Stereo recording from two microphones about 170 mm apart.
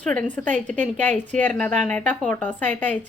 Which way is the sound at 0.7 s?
45° right (ahead or behind).